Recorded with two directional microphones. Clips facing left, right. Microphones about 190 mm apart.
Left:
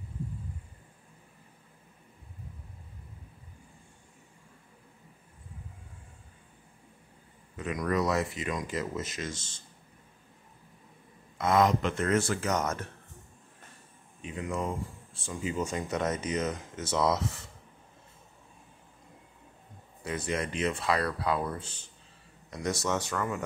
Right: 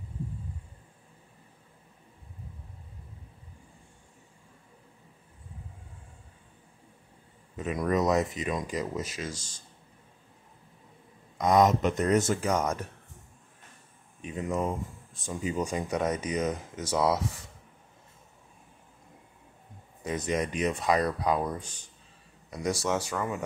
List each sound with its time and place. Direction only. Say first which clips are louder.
7.5 s speech: right 2 dB; 25° right (ahead or behind)
11.3 s speech: right 2 dB; 15° right (ahead or behind)
14.3 s speech: right 3 dB; 20° right (ahead or behind)
20.0 s speech: right 3 dB; 20° right (ahead or behind)